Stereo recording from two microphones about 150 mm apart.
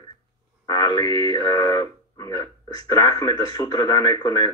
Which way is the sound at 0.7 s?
25° left (ahead or behind).